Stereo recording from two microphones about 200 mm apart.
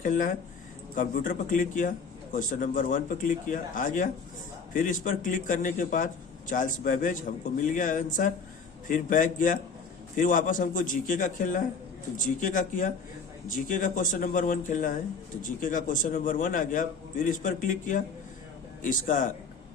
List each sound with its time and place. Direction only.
0.0 s a man's voice: 40° left (ahead or behind)